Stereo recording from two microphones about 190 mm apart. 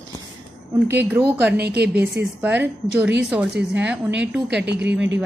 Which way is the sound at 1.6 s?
60° right (ahead or behind).